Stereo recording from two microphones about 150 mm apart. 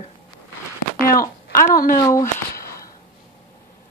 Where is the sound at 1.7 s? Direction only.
75° left (ahead or behind).